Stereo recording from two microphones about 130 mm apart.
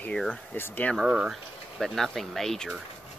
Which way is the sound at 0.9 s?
5° right (ahead or behind).